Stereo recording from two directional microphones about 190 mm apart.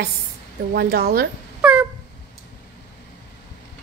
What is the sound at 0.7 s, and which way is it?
Speech, 55° right (ahead or behind).